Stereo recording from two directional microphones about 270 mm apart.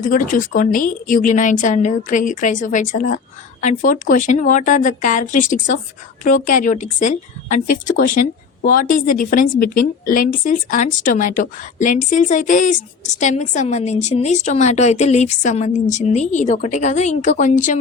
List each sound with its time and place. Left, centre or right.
0.0 s a woman's voice: left